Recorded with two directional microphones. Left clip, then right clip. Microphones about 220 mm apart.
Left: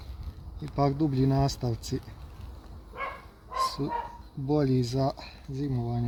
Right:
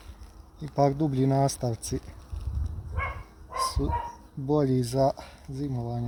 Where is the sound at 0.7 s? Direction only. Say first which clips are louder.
Right 3 dB; 30° right (ahead or behind).